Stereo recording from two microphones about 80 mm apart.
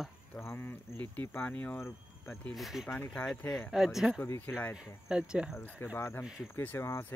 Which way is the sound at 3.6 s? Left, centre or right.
Centre.